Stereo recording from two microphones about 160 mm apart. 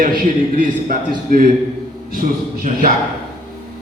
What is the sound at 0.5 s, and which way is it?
Speech, 60° right (ahead or behind).